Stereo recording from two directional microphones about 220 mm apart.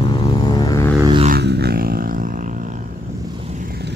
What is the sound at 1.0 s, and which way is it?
Vehicle, 20° right (ahead or behind).